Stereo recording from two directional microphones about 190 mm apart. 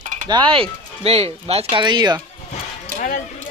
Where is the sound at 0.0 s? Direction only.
40° right (ahead or behind).